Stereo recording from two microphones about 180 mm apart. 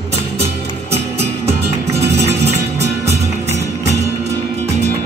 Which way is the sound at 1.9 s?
65° right (ahead or behind).